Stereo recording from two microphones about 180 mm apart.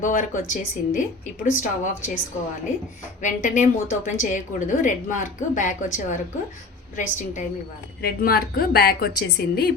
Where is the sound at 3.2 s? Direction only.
45° left (ahead or behind).